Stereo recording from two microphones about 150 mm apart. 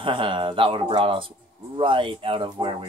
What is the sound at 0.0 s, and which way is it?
Speech, 35° right (ahead or behind).